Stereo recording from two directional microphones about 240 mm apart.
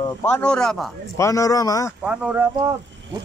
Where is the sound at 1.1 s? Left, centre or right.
Centre.